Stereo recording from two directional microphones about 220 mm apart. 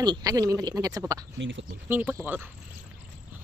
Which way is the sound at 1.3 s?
55° right (ahead or behind).